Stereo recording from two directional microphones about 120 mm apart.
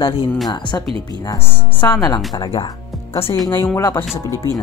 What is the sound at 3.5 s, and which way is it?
Speech, 20° left (ahead or behind).